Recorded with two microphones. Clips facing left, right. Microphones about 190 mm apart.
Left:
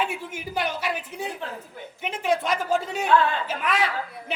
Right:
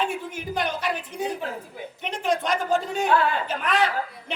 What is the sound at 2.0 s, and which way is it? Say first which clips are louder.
A man's voice: left 1 dB; 5° left (ahead or behind).